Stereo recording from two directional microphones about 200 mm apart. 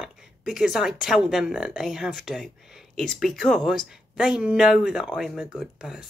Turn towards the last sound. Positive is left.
turn(degrees=-5)  # may be behind; listen again after turning